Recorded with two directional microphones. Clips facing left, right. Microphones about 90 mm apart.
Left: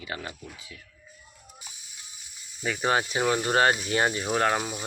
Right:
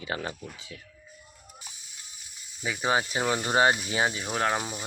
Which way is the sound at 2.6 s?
5° right (ahead or behind).